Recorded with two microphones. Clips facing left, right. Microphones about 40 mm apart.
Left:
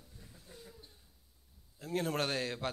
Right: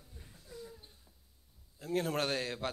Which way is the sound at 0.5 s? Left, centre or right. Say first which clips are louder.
Right 7 dB; left.